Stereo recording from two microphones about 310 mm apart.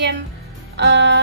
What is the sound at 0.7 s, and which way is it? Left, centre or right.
Music, right.